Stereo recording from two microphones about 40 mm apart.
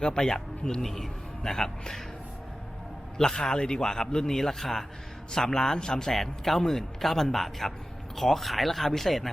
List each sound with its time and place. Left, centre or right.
0.0 s a man's voice: centre
3.3 s a man's voice: centre